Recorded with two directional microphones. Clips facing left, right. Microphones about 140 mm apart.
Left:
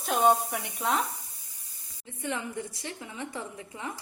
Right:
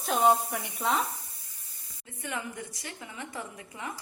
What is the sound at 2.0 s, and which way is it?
A woman's voice, 25° left (ahead or behind).